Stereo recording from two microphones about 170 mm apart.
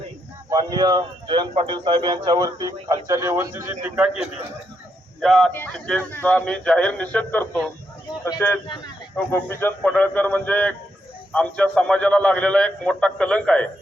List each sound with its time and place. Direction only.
0.5 s a man's voice: 25° right (ahead or behind)
5.2 s speech: centre (ahead or behind)
5.5 s a man's voice: 10° left (ahead or behind)